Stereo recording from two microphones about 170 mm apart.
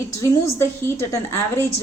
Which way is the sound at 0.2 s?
15° left (ahead or behind).